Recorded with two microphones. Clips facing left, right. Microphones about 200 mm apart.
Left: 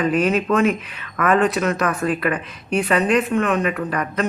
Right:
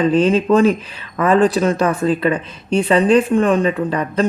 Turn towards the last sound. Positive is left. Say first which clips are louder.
# right 5 dB
turn(degrees=-25)  # may be behind; listen again after turning